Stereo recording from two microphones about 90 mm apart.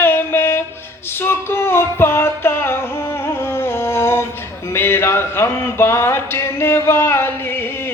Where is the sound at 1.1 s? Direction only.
25° left (ahead or behind).